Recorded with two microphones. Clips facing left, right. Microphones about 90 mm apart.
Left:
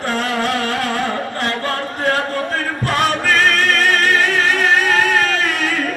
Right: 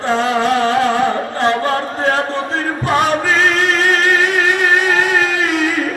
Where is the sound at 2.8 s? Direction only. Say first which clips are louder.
Right 3 dB; 15° right (ahead or behind).